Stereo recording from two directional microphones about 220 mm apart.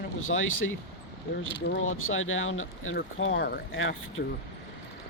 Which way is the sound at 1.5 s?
60° left (ahead or behind).